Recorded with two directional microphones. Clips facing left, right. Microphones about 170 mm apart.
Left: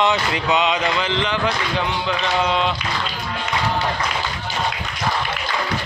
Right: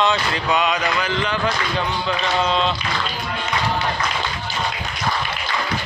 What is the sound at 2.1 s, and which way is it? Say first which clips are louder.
Mantra: even; 15° left (ahead or behind).